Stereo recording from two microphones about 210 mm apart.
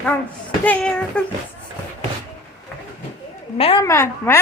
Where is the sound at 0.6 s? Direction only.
5° left (ahead or behind).